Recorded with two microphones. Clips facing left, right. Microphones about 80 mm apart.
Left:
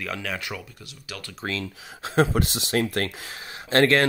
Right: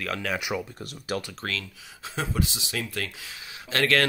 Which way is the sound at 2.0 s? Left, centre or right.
Left.